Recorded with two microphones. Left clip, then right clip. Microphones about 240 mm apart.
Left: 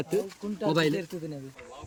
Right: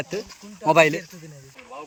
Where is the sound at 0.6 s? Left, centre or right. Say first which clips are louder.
Right 10 dB; right.